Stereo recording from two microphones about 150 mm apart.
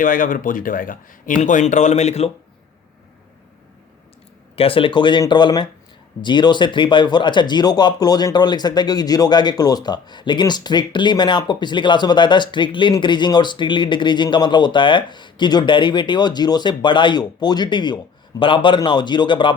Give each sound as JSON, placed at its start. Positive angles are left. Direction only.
{"t": 0.0, "sound": "speech", "side_deg": 65}
{"t": 1.4, "sound": "speech", "side_deg": 55}
{"t": 4.5, "sound": "speech", "side_deg": 40}